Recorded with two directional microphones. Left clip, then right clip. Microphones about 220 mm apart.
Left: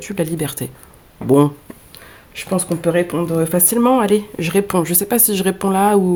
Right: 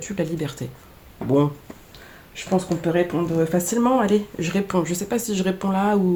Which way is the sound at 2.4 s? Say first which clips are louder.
Left 2 dB; 45° left (ahead or behind).